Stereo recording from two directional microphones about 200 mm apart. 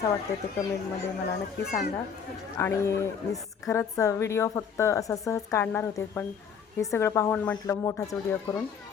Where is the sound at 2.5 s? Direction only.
15° left (ahead or behind).